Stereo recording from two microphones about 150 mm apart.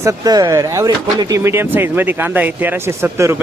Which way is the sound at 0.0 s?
25° right (ahead or behind).